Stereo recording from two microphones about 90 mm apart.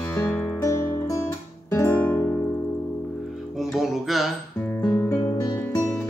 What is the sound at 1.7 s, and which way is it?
Guitar, 25° left (ahead or behind).